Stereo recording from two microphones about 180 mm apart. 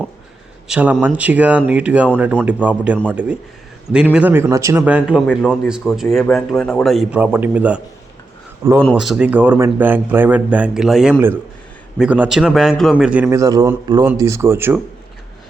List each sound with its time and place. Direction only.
0.7 s speech: 5° right (ahead or behind)
8.8 s speech: centre (ahead or behind)
13.4 s a man's voice: 20° right (ahead or behind)